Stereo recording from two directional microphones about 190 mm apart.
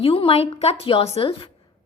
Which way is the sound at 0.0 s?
30° left (ahead or behind).